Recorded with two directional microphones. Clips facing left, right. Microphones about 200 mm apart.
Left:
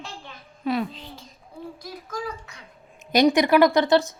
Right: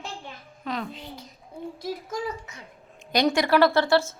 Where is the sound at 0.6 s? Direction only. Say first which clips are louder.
Left 7 dB; 10° left (ahead or behind).